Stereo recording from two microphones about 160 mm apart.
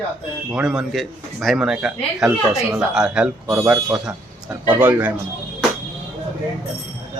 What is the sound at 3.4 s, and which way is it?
A man's voice, 20° right (ahead or behind).